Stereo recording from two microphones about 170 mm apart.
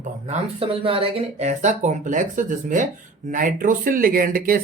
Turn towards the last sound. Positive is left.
turn(degrees=-55)  # may be behind; listen again after turning